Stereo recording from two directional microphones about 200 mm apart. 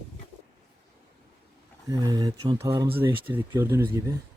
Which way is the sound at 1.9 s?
20° right (ahead or behind).